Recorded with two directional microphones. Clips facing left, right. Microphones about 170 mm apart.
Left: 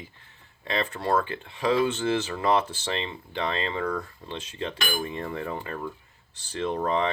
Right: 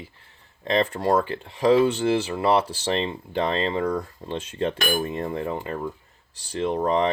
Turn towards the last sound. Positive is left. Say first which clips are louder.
# right 4 dB
turn(degrees=-35)  # may be behind; listen again after turning